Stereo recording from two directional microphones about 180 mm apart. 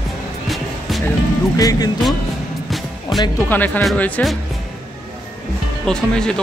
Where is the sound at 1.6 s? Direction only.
20° left (ahead or behind).